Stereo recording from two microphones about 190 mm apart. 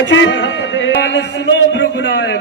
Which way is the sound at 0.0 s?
75° left (ahead or behind).